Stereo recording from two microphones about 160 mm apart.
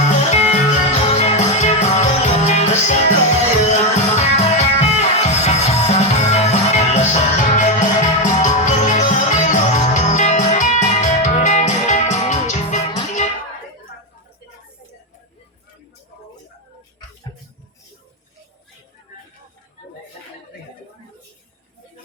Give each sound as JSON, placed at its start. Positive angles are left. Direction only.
{"t": 0.2, "sound": "music", "side_deg": 45}